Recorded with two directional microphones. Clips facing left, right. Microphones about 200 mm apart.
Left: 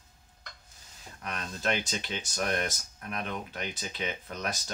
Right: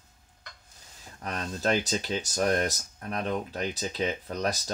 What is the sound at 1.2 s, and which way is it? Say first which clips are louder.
Speech: right 4 dB; 35° right (ahead or behind).